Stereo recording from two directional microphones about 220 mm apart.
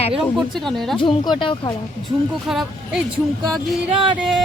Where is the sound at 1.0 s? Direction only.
20° left (ahead or behind).